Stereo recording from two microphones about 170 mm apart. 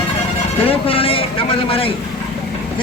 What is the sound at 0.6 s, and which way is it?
A man's voice, 35° left (ahead or behind).